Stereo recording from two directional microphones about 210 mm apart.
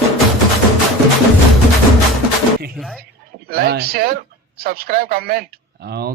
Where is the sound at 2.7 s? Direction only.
Centre (ahead or behind).